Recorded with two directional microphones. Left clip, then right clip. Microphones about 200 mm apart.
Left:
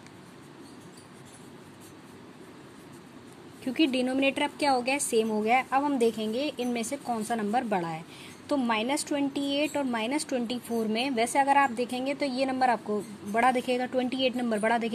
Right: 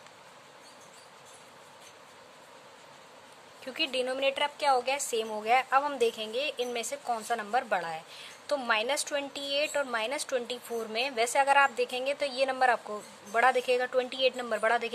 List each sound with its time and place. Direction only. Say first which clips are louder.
3.6 s a woman's voice: left 4 dB; centre (ahead or behind)